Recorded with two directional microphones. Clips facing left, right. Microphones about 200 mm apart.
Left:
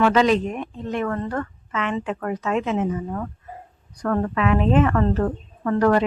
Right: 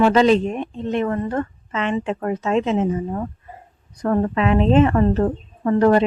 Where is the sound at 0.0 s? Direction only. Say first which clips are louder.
Right 3 dB; 30° right (ahead or behind).